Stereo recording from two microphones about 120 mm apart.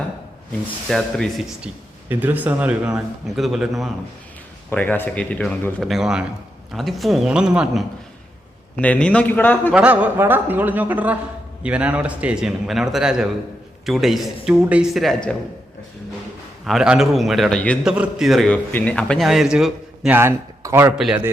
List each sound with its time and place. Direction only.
0.9 s a man's voice: 5° left (ahead or behind)
1.6 s a man's voice: 15° right (ahead or behind)
4.7 s a man's voice: 15° left (ahead or behind)
5.8 s a man's voice: centre (ahead or behind)
8.7 s a man's voice: 10° left (ahead or behind)
9.7 s a man's voice: 10° right (ahead or behind)
16.6 s a man's voice: 5° right (ahead or behind)
20.1 s speech: 20° right (ahead or behind)